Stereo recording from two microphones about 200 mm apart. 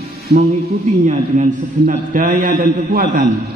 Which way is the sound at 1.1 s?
40° right (ahead or behind).